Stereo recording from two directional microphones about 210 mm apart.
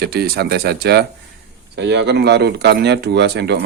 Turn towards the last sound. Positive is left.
turn(degrees=-55)  # may be behind; listen again after turning